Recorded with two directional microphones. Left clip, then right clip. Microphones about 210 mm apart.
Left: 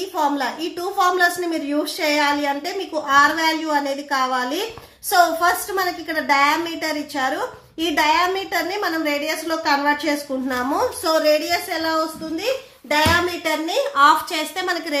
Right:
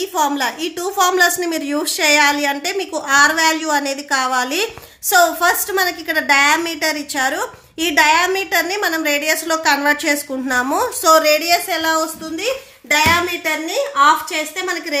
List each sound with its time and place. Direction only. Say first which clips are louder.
0.1 s a woman's voice: right 2 dB; 20° right (ahead or behind)
13.7 s a woman's voice: right 1 dB; 5° right (ahead or behind)